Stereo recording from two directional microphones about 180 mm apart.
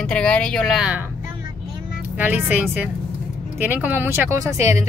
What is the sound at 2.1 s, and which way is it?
Speech, 10° right (ahead or behind).